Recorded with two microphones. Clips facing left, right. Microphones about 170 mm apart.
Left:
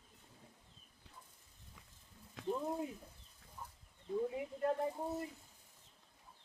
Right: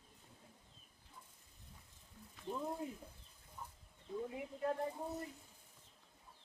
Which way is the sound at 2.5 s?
10° left (ahead or behind).